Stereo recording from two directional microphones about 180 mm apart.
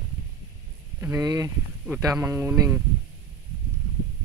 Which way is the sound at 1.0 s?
15° right (ahead or behind).